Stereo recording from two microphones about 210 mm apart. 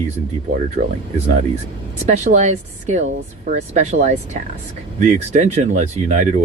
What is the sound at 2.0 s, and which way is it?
Speech, 35° right (ahead or behind).